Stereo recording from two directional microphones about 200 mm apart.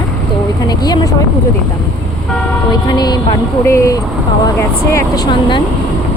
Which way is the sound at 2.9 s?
20° left (ahead or behind).